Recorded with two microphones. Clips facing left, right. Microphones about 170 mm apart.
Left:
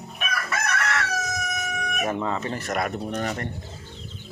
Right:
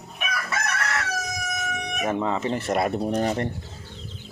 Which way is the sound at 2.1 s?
20° right (ahead or behind).